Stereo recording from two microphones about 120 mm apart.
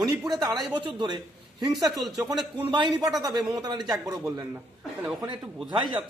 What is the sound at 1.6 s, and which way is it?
Speech, centre (ahead or behind).